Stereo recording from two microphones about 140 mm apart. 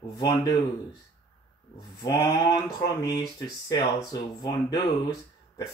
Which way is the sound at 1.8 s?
30° left (ahead or behind).